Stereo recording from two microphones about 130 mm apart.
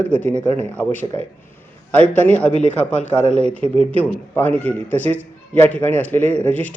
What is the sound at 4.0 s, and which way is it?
A man's voice, 15° left (ahead or behind).